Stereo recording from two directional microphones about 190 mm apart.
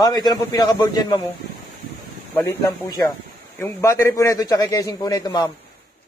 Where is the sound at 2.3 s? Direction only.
15° left (ahead or behind).